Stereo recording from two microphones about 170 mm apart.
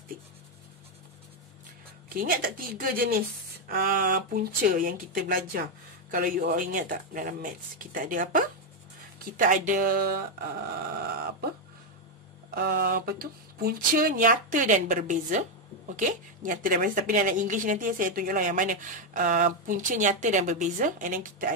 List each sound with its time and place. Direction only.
2.1 s a woman's voice: 55° right (ahead or behind)
12.4 s a woman's voice: 60° right (ahead or behind)